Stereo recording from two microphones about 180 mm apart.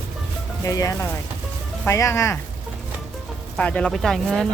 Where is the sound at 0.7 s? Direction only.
20° left (ahead or behind).